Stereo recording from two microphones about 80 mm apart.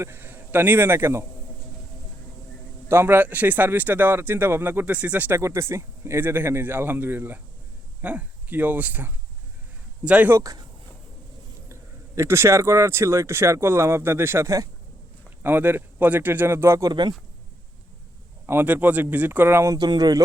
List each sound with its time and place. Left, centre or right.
0.0 s a man's voice: right
2.9 s speech: right
5.4 s speech: right; by 10.3 s centre
10.4 s speech: right
11.7 s speech: right
15.4 s speech: right
16.9 s speech: right
18.4 s speech: right
19.7 s speech: right